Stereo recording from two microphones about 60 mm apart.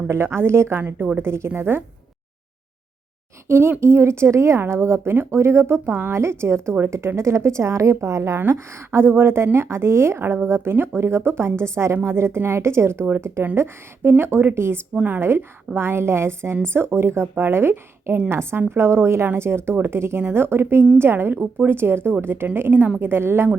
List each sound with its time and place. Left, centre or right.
0.1 s speech: right
0.9 s speech: right
3.5 s a woman's voice: right
8.5 s speech: right
14.9 s a woman's voice: right
15.2 s speech: right